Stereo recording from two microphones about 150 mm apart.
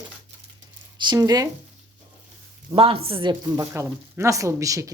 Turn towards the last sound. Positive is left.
turn(degrees=-20)  # may be behind; listen again after turning